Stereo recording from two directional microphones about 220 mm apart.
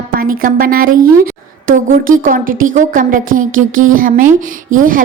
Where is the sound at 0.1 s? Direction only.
40° right (ahead or behind).